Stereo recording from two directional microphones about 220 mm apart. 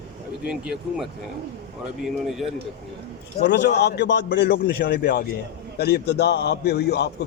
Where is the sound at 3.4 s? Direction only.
50° left (ahead or behind).